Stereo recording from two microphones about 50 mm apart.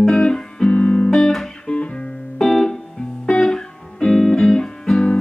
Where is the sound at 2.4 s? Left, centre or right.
Centre.